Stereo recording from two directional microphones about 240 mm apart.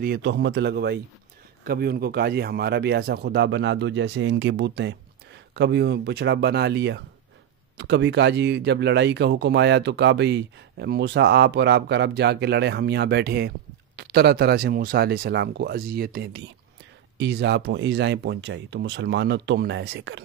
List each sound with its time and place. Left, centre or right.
0.0 s speech: right